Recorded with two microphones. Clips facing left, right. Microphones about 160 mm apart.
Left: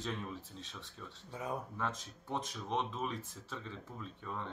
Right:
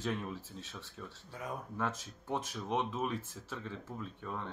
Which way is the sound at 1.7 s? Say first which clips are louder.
Right 2 dB; 5° right (ahead or behind).